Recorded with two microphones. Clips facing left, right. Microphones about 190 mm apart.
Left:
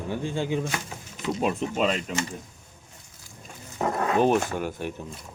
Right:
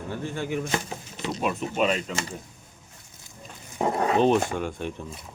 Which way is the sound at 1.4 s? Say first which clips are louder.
Even; 30° left (ahead or behind).